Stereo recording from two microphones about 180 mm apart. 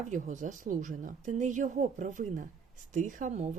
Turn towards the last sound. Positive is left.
turn(degrees=-40)  # may be behind; listen again after turning